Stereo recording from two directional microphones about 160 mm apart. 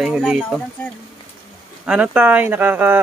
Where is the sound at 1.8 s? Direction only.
5° right (ahead or behind).